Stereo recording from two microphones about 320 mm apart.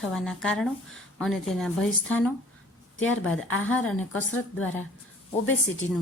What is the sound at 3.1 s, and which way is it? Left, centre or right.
Speech, left.